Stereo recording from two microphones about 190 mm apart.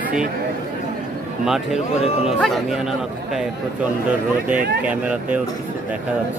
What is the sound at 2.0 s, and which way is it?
Speech, 35° left (ahead or behind).